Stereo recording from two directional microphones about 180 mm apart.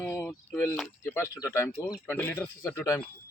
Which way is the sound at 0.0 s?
10° left (ahead or behind).